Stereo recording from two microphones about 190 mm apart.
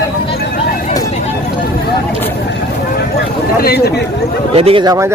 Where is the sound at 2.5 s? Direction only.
60° left (ahead or behind).